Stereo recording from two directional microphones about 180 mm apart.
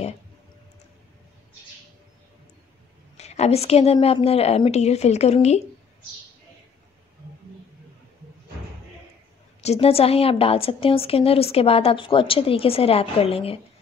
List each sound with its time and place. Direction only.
3.2 s a woman's voice: 35° left (ahead or behind)
9.6 s a woman's voice: 35° left (ahead or behind)